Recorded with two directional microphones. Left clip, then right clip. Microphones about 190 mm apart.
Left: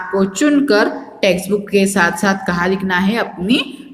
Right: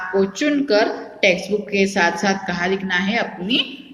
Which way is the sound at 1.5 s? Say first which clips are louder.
Left 4 dB; 50° left (ahead or behind).